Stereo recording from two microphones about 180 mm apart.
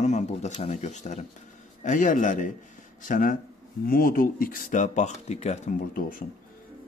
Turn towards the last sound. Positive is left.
turn(degrees=50)  # may be behind; listen again after turning